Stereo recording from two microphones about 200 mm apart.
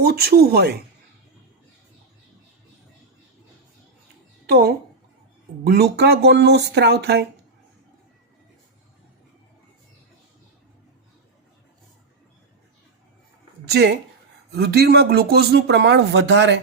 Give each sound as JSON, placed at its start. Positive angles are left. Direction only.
{"t": 0.0, "sound": "speech", "side_deg": -50}
{"t": 4.4, "sound": "speech", "side_deg": -50}
{"t": 13.7, "sound": "a woman's voice", "side_deg": -55}